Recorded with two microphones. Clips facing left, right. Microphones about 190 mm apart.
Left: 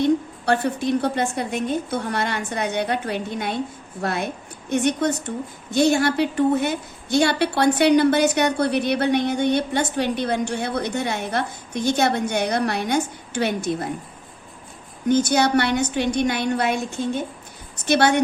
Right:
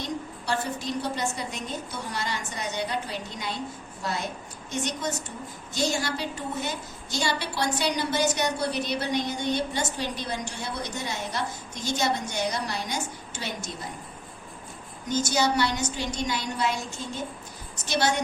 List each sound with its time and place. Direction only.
0.0 s a woman's voice: 60° left (ahead or behind)
15.0 s a woman's voice: 60° left (ahead or behind)